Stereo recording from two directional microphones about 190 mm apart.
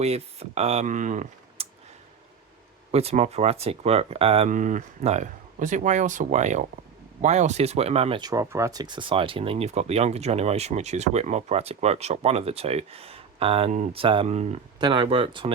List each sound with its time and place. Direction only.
0.0 s speech: 35° right (ahead or behind)
2.9 s speech: 30° right (ahead or behind)
14.8 s speech: 25° right (ahead or behind)